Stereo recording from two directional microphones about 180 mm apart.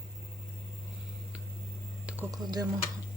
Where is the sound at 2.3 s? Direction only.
20° right (ahead or behind).